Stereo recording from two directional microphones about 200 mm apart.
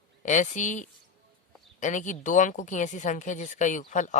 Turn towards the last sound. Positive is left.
turn(degrees=40)  # may be behind; listen again after turning